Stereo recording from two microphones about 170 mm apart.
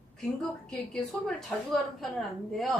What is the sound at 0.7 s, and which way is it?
A woman's voice, 5° left (ahead or behind).